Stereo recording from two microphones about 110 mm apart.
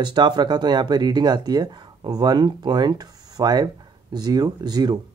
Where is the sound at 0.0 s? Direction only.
45° right (ahead or behind).